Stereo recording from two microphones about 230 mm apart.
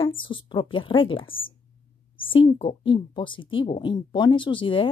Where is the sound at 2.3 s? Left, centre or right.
Left.